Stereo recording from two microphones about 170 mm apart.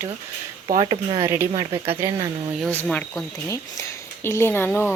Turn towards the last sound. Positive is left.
turn(degrees=15)  # may be behind; listen again after turning